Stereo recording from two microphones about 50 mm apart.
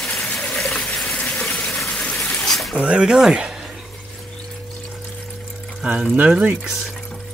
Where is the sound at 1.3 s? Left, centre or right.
Left.